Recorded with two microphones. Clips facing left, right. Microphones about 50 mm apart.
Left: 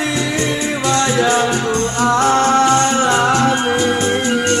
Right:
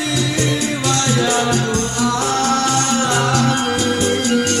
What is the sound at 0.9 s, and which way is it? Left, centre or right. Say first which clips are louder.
Music: left 4 dB; left.